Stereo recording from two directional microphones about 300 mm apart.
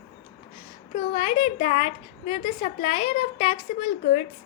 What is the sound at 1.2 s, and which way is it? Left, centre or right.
A woman's voice, left.